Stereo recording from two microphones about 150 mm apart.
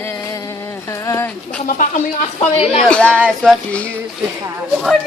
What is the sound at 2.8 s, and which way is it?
Speech, 10° left (ahead or behind).